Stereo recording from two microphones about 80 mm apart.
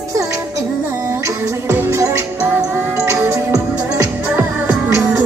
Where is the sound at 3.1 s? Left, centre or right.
Right.